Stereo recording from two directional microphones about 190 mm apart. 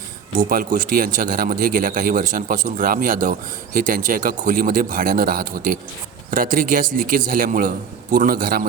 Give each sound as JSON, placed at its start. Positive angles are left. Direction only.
{"t": 0.3, "sound": "a man's voice", "side_deg": -45}